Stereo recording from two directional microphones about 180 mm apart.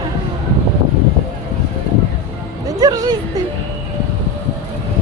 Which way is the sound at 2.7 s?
20° right (ahead or behind).